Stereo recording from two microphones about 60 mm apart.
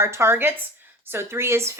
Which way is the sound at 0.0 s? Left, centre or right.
Right.